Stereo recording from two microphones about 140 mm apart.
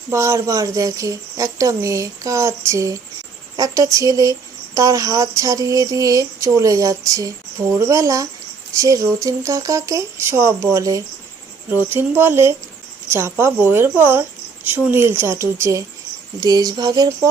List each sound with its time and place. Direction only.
0.1 s speech: 20° right (ahead or behind)